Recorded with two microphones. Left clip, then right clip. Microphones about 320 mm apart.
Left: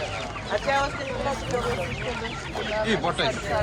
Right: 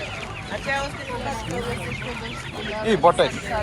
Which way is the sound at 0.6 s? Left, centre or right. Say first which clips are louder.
Left 1 dB; left.